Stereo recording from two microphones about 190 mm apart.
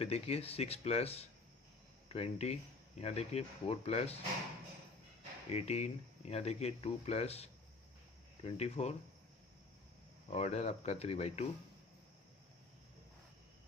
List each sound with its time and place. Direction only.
0.0 s speech: 35° left (ahead or behind)
5.5 s speech: 35° left (ahead or behind)
10.2 s speech: 35° left (ahead or behind)